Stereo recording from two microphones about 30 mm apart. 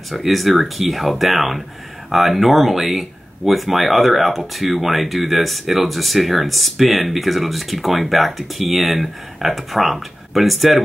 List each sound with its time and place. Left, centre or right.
0.1 s speech: centre